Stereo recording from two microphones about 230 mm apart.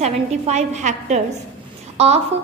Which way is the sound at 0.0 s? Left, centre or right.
Right.